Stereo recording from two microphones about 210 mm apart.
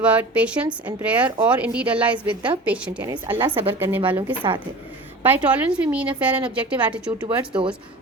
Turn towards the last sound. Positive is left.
turn(degrees=-25)  # may be behind; listen again after turning